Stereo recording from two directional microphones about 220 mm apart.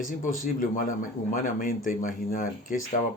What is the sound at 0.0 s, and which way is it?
Speech, 35° left (ahead or behind).